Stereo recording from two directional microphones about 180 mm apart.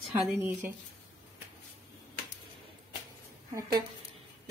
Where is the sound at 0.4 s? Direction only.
10° right (ahead or behind).